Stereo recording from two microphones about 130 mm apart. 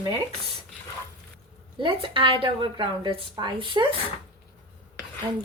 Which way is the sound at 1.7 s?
40° right (ahead or behind).